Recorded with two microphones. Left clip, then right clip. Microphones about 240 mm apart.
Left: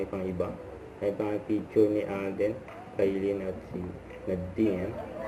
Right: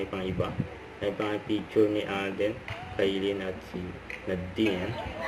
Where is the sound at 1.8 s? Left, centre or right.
Right.